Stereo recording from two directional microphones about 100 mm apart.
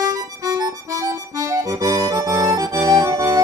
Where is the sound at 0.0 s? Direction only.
40° right (ahead or behind).